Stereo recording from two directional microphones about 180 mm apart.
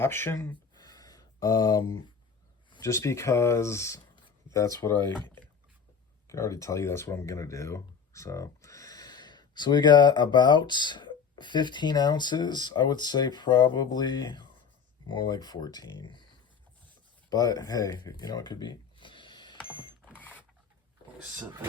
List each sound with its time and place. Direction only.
0.0 s speech: 15° left (ahead or behind)
0.9 s a sound: 20° left (ahead or behind)
2.6 s speech: 20° left (ahead or behind)
4.9 s speech: 25° right (ahead or behind)
6.2 s speech: 15° left (ahead or behind)
17.2 s speech: 20° left (ahead or behind)
20.1 s mechanisms: 10° left (ahead or behind)